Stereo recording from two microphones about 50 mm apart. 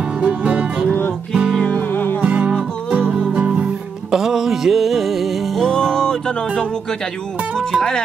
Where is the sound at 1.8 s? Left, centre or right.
Left.